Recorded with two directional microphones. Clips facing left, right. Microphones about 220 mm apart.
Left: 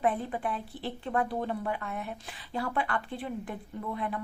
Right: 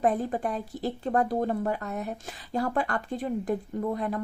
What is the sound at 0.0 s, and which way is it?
Speech, 40° right (ahead or behind).